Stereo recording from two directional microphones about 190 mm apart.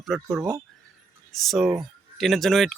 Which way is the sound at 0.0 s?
Centre (ahead or behind).